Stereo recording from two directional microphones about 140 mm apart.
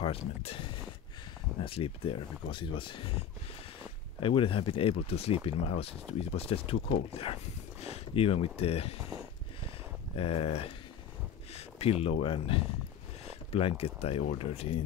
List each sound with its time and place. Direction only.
0.0 s speech: 45° left (ahead or behind)
1.6 s speech: 40° left (ahead or behind)
10.1 s speech: 45° left (ahead or behind)